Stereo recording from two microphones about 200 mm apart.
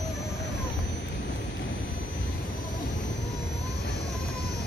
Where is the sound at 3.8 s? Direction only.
60° left (ahead or behind).